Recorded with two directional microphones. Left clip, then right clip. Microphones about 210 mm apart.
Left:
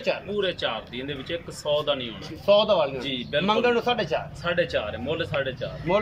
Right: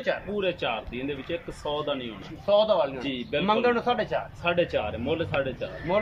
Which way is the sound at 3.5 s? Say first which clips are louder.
Left 1 dB; centre (ahead or behind).